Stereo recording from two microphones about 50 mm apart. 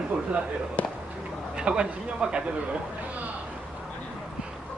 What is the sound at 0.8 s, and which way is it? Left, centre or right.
Basketball bounce, left.